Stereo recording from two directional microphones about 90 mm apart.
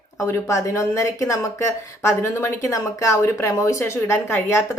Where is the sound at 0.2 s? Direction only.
35° left (ahead or behind).